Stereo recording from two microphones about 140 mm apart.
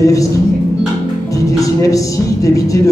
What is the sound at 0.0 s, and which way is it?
Speech, 25° left (ahead or behind).